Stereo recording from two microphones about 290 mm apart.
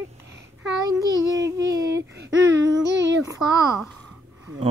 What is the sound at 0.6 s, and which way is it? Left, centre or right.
A child's voice, centre.